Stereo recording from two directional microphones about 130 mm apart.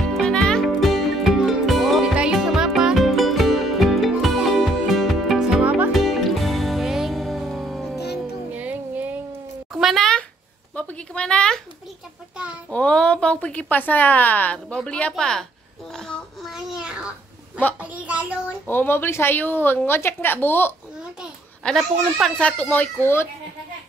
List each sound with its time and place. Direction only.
0.0 s music: 5° left (ahead or behind)
5.9 s music: centre (ahead or behind)
8.5 s music: 10° right (ahead or behind)
9.7 s a sound: centre (ahead or behind)
12.6 s a woman's voice: 10° left (ahead or behind)
15.9 s child singing: 5° left (ahead or behind)
17.7 s a woman's voice: 10° right (ahead or behind)
18.7 s a woman's voice: 15° left (ahead or behind)